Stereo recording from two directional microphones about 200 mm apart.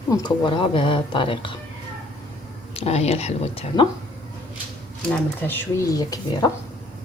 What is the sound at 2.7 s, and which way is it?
Speech, 30° left (ahead or behind).